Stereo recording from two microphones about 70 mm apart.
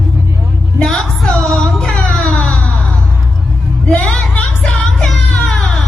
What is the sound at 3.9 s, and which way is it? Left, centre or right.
Music, centre.